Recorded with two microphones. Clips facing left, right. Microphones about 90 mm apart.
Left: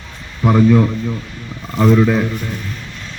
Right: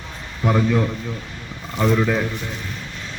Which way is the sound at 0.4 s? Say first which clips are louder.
Left 7 dB; 10° left (ahead or behind).